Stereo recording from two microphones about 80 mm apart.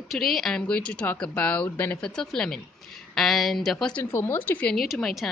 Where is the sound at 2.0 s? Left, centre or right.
Centre.